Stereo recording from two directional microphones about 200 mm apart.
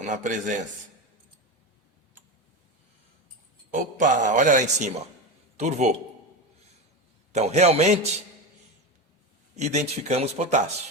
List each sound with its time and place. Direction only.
0.0 s a man's voice: 40° right (ahead or behind)
3.7 s a man's voice: 40° right (ahead or behind)
7.3 s a man's voice: 35° right (ahead or behind)
9.6 s a man's voice: 35° right (ahead or behind)